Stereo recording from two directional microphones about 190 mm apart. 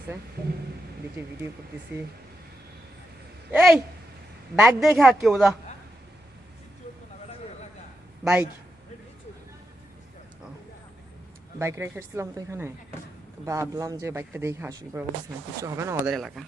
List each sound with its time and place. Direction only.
1.2 s speech: 10° right (ahead or behind)
3.5 s babbling: 5° right (ahead or behind)
4.5 s a woman's voice: centre (ahead or behind)
8.2 s speech: 5° right (ahead or behind)
11.6 s speech: 15° right (ahead or behind)
16.1 s a woman's voice: centre (ahead or behind)